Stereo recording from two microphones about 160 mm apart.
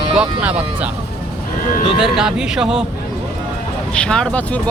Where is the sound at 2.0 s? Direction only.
5° right (ahead or behind).